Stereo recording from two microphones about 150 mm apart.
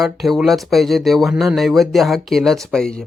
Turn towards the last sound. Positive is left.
turn(degrees=5)  # may be behind; listen again after turning